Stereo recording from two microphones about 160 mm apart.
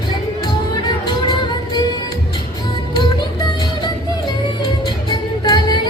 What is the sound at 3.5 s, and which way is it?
Music, 30° left (ahead or behind).